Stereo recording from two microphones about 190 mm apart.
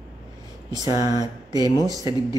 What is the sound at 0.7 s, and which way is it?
Speech, 20° right (ahead or behind).